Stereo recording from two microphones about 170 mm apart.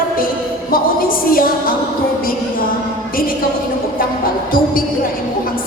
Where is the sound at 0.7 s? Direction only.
55° left (ahead or behind).